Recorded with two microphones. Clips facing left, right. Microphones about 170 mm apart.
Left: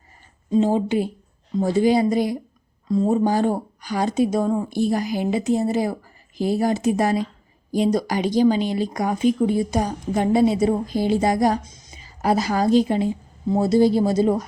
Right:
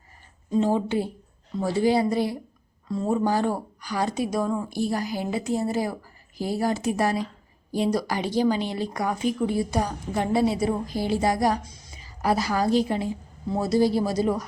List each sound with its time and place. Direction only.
0.5 s a woman's voice: 20° left (ahead or behind)